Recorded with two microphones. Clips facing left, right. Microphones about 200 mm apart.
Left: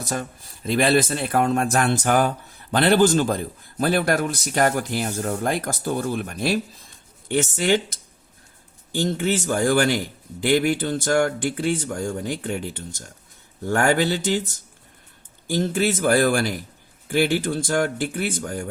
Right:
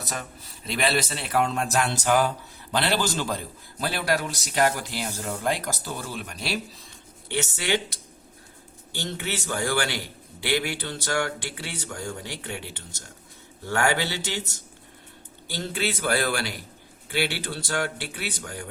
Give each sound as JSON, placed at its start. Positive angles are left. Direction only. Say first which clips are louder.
{"t": 0.0, "sound": "a man's voice", "louder": "left 6 dB", "side_deg": 50}
{"t": 9.0, "sound": "a man's voice", "louder": "left 8 dB", "side_deg": 45}
{"t": 15.4, "sound": "a man's voice", "louder": "left 8 dB", "side_deg": 45}